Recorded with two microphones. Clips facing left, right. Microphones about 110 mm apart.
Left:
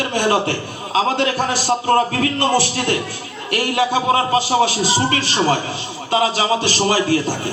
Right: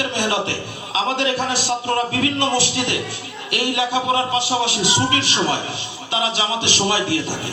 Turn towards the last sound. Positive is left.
turn(degrees=40)  # may be behind; listen again after turning